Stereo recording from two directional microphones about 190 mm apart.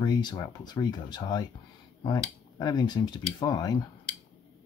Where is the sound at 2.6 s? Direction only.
20° left (ahead or behind).